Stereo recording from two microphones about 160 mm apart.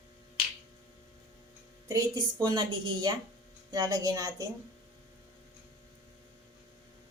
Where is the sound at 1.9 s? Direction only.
25° right (ahead or behind).